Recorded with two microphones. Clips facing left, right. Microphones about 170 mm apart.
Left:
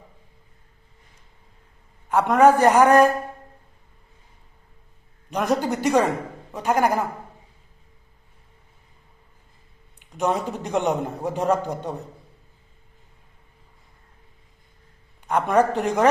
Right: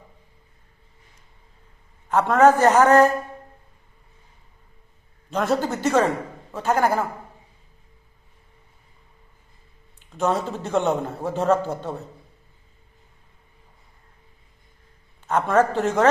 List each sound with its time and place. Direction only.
2.0 s a man's voice: 15° left (ahead or behind)
5.3 s a man's voice: 15° left (ahead or behind)
10.0 s a man's voice: 15° left (ahead or behind)
15.3 s a man's voice: 15° left (ahead or behind)